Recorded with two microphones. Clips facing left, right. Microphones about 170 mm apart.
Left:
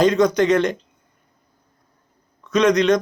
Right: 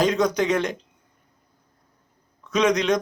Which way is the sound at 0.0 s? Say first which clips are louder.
Left 5 dB; 5° right (ahead or behind).